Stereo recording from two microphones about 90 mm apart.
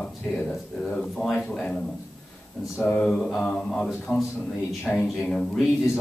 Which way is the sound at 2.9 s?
10° left (ahead or behind).